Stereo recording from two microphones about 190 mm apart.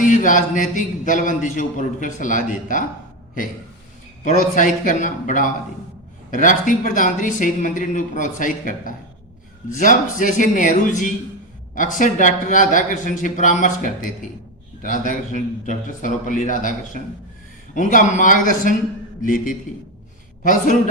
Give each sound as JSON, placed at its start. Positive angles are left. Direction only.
{"t": 0.0, "sound": "a man's voice", "side_deg": 45}
{"t": 4.2, "sound": "a man's voice", "side_deg": 40}